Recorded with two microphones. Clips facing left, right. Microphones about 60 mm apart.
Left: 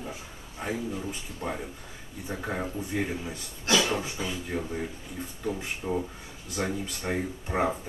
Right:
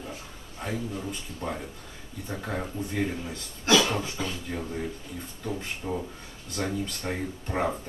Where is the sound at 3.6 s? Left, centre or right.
Right.